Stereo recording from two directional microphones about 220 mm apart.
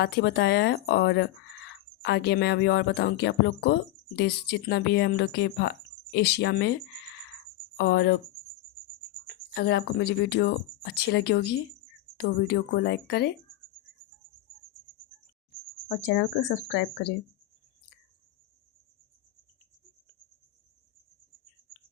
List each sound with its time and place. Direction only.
0.0 s speech: 50° left (ahead or behind)
7.8 s speech: 50° left (ahead or behind)
9.2 s speech: 45° left (ahead or behind)
15.9 s speech: 50° left (ahead or behind)